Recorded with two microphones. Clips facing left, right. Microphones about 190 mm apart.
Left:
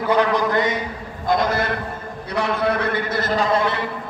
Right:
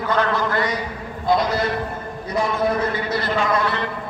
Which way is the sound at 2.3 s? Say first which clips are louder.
Even; 70° left (ahead or behind).